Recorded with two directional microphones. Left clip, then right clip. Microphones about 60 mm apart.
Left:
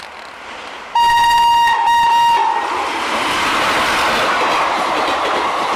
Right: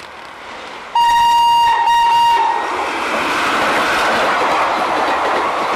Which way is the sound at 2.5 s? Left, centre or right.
Centre.